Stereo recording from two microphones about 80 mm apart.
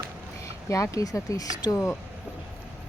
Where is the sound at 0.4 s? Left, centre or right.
Left.